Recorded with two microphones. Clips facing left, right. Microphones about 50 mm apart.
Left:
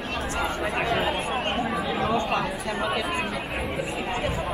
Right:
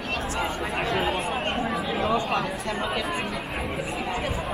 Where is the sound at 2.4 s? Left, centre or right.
Centre.